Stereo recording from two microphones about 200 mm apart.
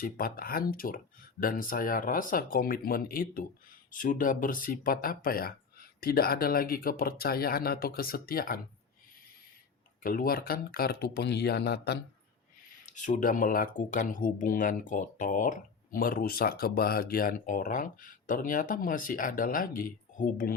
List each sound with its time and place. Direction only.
0.0 s speech: 45° left (ahead or behind)
10.0 s speech: 45° left (ahead or behind)
12.8 s speech: 40° left (ahead or behind)